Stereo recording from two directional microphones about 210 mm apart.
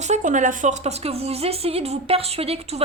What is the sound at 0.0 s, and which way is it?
Speech, 35° right (ahead or behind).